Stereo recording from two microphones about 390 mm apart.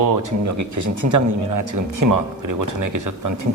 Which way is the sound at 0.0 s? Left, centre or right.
Right.